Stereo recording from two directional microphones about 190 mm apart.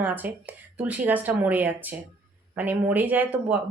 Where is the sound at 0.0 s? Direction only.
10° right (ahead or behind).